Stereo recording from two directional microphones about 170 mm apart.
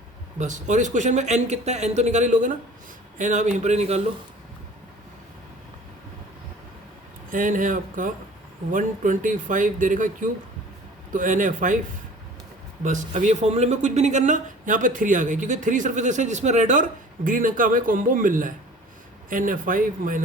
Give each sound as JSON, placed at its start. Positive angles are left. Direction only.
{"t": 0.3, "sound": "speech", "side_deg": -45}
{"t": 7.3, "sound": "speech", "side_deg": -50}
{"t": 12.8, "sound": "speech", "side_deg": -45}